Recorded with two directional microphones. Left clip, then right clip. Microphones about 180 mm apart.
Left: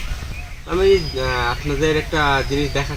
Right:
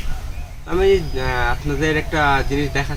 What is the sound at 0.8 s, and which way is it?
Speech, 25° right (ahead or behind).